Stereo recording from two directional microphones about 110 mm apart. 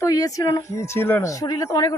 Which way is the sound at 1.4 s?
30° left (ahead or behind).